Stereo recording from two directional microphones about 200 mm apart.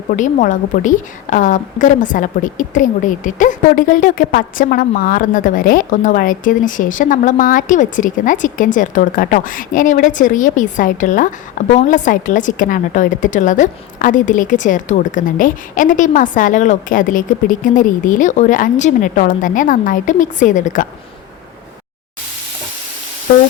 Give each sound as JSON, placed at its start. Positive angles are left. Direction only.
{"t": 0.1, "sound": "a woman's voice", "side_deg": 40}